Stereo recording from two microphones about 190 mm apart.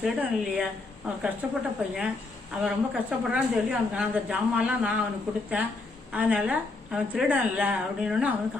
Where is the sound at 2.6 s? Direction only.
5° right (ahead or behind).